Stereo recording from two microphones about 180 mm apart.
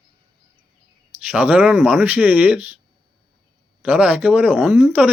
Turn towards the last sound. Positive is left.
turn(degrees=-10)  # may be behind; listen again after turning